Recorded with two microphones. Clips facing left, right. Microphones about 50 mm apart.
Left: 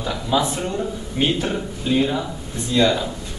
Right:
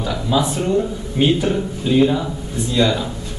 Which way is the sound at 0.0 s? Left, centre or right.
Centre.